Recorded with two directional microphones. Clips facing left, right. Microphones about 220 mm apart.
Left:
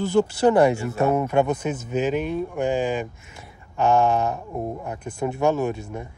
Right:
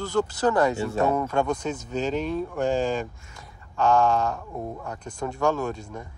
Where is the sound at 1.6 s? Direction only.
5° left (ahead or behind).